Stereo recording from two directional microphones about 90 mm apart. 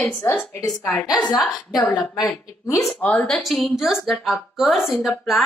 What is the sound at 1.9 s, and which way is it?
Speech, 50° left (ahead or behind).